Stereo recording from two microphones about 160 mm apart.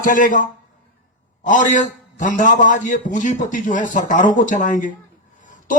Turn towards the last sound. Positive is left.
turn(degrees=55)  # may be behind; listen again after turning